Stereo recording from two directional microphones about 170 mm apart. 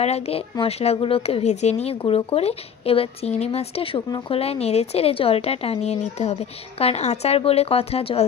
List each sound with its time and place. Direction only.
0.0 s speech: 40° left (ahead or behind)